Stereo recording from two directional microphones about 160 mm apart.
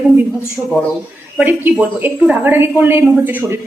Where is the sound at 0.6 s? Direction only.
10° right (ahead or behind).